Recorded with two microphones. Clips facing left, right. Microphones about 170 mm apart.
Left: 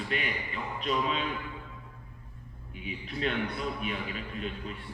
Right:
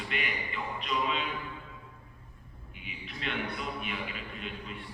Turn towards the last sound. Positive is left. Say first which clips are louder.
# left 4 dB
turn(degrees=40)  # may be behind; listen again after turning